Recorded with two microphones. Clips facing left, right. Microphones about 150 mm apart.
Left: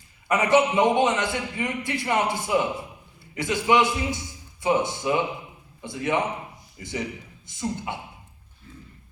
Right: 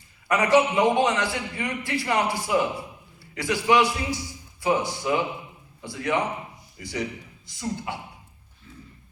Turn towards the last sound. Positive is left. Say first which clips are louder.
# left 1 dB
turn(degrees=20)  # may be behind; listen again after turning